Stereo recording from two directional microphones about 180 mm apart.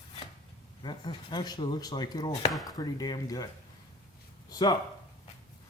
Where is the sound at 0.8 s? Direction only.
25° left (ahead or behind).